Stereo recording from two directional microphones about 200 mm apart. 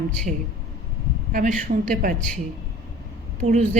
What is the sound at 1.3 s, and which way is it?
Speech, 40° right (ahead or behind).